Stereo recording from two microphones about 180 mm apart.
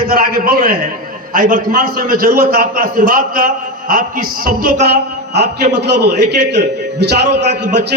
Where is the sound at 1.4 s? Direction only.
50° right (ahead or behind).